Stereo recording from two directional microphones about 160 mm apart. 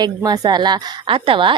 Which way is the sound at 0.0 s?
25° right (ahead or behind).